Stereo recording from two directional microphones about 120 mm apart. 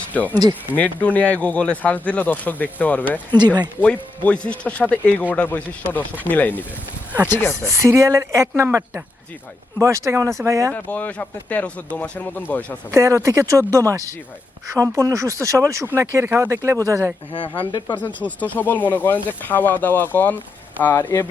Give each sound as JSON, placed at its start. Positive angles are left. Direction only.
{"t": 0.1, "sound": "speech", "side_deg": 15}
{"t": 3.3, "sound": "speech", "side_deg": -35}
{"t": 3.8, "sound": "speech", "side_deg": 10}
{"t": 7.8, "sound": "speech", "side_deg": -25}
{"t": 10.8, "sound": "speech", "side_deg": 15}
{"t": 12.9, "sound": "speech", "side_deg": -25}
{"t": 17.3, "sound": "speech", "side_deg": 40}
{"t": 17.9, "sound": "speech", "side_deg": 15}